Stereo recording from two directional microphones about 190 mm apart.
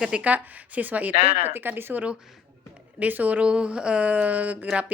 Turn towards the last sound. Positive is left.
turn(degrees=-5)  # may be behind; listen again after turning